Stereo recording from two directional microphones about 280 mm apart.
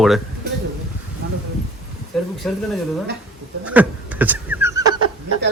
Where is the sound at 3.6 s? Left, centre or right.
Centre.